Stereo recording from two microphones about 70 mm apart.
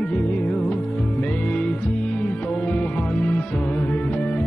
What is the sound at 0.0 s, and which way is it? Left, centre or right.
Music, centre.